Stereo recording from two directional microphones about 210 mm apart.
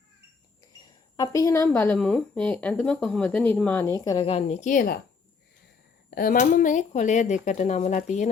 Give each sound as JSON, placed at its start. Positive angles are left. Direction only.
{"t": 1.1, "sound": "a woman's voice", "side_deg": 15}
{"t": 6.1, "sound": "speech", "side_deg": 45}